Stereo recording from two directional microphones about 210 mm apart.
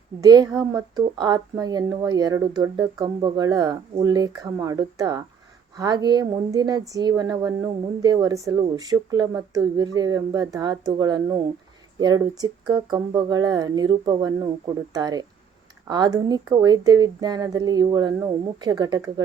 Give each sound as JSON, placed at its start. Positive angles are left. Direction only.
{"t": 0.2, "sound": "speech", "side_deg": -20}